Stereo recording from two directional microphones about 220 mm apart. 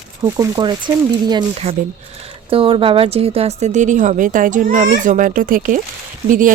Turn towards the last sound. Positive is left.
turn(degrees=-35)  # may be behind; listen again after turning